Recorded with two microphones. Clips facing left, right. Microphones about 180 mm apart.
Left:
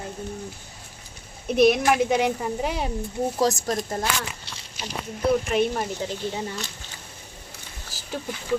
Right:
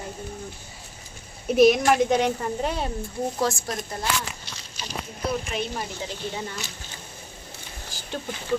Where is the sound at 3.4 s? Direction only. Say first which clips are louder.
Left 5 dB; 40° left (ahead or behind).